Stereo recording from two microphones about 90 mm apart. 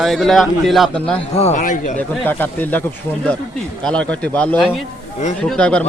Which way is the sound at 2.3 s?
20° left (ahead or behind).